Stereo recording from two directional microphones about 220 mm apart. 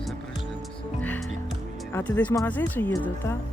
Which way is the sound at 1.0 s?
5° left (ahead or behind).